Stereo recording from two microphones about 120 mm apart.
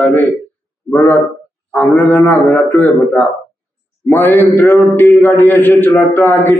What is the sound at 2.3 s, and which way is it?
A man's voice, 15° left (ahead or behind).